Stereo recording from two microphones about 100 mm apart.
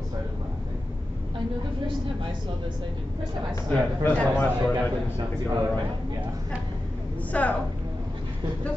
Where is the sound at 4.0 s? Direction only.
20° left (ahead or behind).